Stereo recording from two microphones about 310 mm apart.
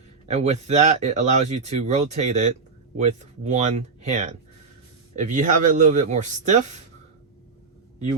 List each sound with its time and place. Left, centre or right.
0.3 s speech: right